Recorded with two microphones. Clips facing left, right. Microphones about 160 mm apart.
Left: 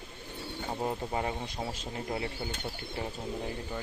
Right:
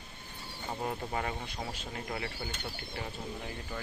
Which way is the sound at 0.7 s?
20° left (ahead or behind).